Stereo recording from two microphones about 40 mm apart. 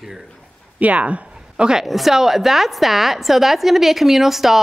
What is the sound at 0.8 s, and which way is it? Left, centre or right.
Speech, right.